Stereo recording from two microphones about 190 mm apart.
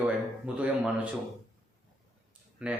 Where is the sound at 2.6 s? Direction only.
5° right (ahead or behind).